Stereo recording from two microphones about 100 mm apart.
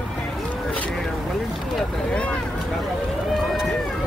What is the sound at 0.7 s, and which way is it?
Vehicle, 15° left (ahead or behind).